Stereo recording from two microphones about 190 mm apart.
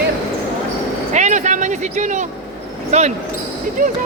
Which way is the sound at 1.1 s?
40° right (ahead or behind).